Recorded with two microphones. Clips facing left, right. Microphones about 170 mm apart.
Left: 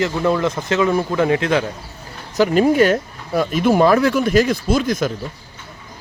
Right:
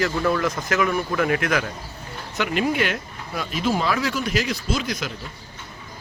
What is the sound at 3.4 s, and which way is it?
Speech, 50° left (ahead or behind).